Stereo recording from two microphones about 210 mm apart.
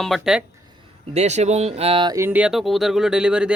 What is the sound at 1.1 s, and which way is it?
Speech, 30° right (ahead or behind).